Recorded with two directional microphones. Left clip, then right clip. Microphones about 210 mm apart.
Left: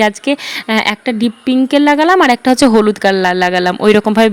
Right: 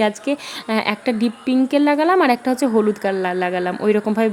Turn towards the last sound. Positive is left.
turn(degrees=40)  # may be behind; listen again after turning